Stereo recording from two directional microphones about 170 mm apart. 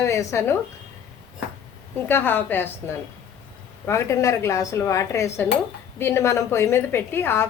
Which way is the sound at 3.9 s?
15° left (ahead or behind).